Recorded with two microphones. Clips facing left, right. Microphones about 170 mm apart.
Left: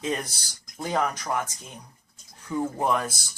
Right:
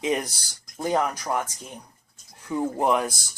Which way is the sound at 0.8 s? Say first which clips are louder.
Right 3 dB; 10° right (ahead or behind).